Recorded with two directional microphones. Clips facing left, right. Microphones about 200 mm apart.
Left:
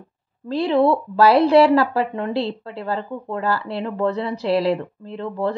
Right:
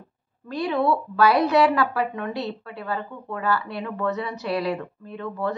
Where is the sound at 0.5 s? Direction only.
30° left (ahead or behind).